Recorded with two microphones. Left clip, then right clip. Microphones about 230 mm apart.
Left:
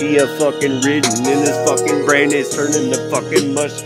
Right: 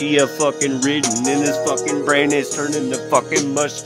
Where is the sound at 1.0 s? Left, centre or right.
Left.